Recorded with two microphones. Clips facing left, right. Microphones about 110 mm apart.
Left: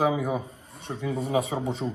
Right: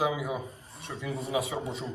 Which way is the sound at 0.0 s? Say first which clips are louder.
Left 5 dB; 35° left (ahead or behind).